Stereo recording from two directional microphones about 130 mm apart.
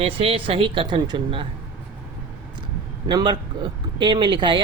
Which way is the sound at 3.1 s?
35° right (ahead or behind).